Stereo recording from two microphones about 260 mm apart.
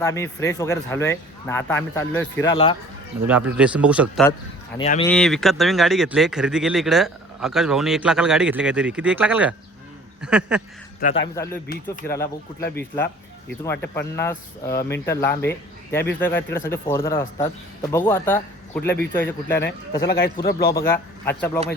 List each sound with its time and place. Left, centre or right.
0.0 s speech: centre
3.2 s a man's voice: centre
4.8 s speech: left
5.0 s a man's voice: centre
11.0 s a man's voice: left
11.4 s speech: centre
13.5 s speech: centre
20.0 s a man's voice: left
20.7 s speech: centre